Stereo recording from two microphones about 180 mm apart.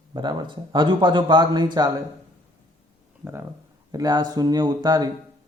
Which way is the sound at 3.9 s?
20° right (ahead or behind).